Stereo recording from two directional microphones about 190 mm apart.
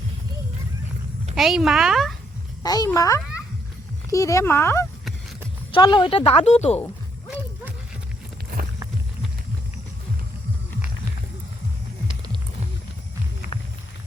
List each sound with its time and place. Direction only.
1.4 s speech: centre (ahead or behind)
2.6 s a child's voice: 20° left (ahead or behind)
5.7 s speech: 25° left (ahead or behind)